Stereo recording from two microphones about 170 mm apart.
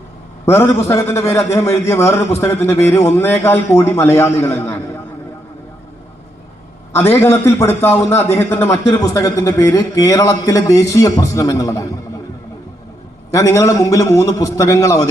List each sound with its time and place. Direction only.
0.9 s a man's voice: 15° left (ahead or behind)
6.9 s a man's voice: 15° left (ahead or behind)
13.3 s a man's voice: 15° left (ahead or behind)